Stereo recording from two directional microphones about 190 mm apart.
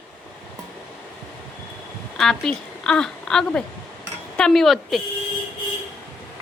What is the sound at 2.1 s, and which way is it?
A woman's voice, 5° left (ahead or behind).